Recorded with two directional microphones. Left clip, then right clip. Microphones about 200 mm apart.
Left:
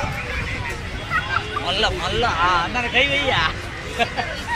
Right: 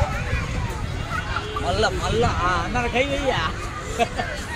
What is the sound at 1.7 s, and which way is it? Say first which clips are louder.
Speech: left 1 dB; 55° right (ahead or behind).